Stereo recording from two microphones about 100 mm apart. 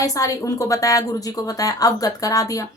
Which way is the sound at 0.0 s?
35° left (ahead or behind).